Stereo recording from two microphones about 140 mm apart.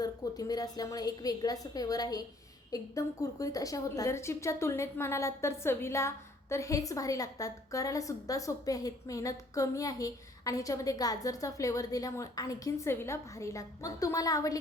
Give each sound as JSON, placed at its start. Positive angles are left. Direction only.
{"t": 0.0, "sound": "a woman's voice", "side_deg": 25}